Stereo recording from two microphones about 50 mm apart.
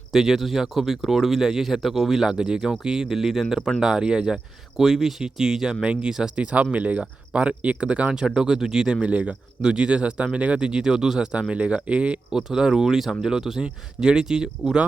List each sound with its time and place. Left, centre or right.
0.1 s speech: centre
6.3 s speech: right
8.4 s speech: centre
12.3 s speech: centre